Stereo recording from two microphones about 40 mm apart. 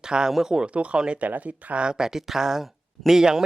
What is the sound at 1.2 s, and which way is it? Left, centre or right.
Speech, right.